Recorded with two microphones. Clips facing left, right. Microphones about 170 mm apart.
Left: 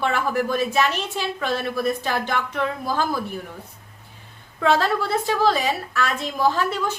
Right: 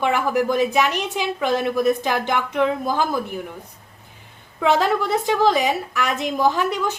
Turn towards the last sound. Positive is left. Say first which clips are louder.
# right 2 dB
turn(degrees=-15)  # may be behind; listen again after turning